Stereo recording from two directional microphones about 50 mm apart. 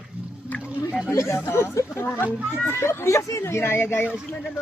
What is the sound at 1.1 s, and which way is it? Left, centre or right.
Speech, left.